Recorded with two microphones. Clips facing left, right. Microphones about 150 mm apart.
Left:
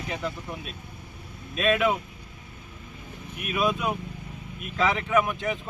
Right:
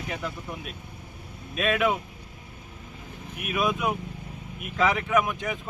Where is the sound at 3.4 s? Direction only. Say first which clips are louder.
Even; 15° right (ahead or behind).